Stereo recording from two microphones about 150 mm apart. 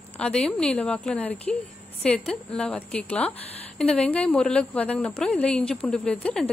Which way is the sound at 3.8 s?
5° left (ahead or behind).